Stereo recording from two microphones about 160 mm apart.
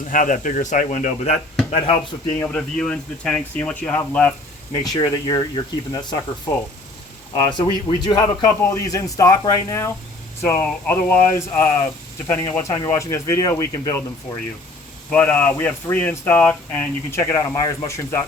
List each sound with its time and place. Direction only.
0.1 s speech: 55° left (ahead or behind)
1.7 s speech: 35° left (ahead or behind)
2.4 s speech: 5° left (ahead or behind)
4.7 s a man's voice: 25° left (ahead or behind)
7.9 s a man's voice: 25° left (ahead or behind)